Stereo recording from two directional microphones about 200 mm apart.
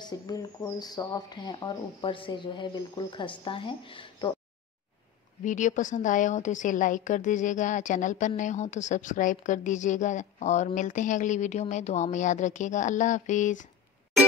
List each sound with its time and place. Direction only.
0.0 s speech: 20° left (ahead or behind)
5.4 s a woman's voice: 40° left (ahead or behind)